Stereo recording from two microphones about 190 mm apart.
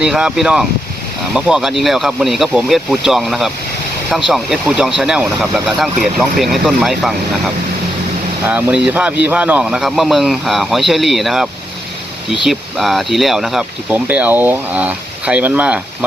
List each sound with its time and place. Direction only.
0.0 s speech: 5° right (ahead or behind)
8.4 s speech: 5° right (ahead or behind)
12.5 s speech: centre (ahead or behind)